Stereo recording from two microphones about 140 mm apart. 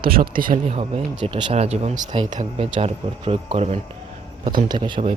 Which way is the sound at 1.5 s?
50° right (ahead or behind).